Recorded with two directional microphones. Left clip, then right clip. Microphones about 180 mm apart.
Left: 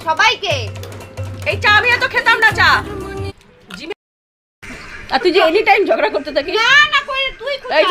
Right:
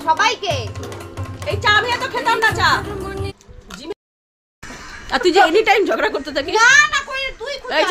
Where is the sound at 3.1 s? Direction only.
Centre (ahead or behind).